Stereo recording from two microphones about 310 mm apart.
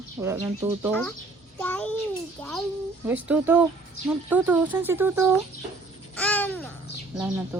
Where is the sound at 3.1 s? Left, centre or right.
Centre.